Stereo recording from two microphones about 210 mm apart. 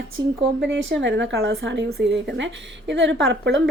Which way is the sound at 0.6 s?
60° right (ahead or behind).